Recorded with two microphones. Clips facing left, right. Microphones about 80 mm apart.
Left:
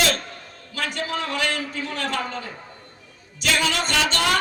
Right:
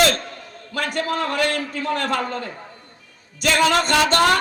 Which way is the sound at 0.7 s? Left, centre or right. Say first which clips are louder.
Right 4 dB; right.